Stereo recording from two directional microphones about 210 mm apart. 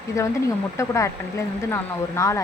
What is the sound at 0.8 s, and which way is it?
Speech, 15° left (ahead or behind).